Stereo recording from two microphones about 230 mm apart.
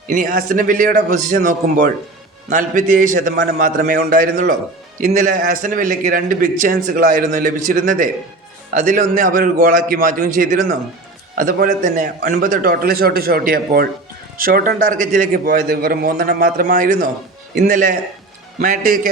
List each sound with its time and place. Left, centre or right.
0.1 s a man's voice: right